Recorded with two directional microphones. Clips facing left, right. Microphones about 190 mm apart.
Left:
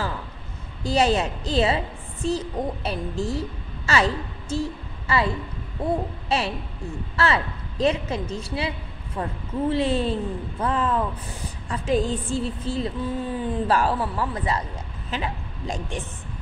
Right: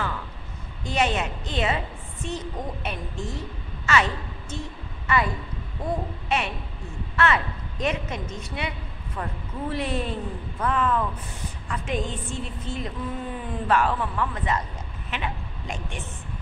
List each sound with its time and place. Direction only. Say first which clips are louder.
0.8 s a woman's voice: left 4 dB; 35° left (ahead or behind)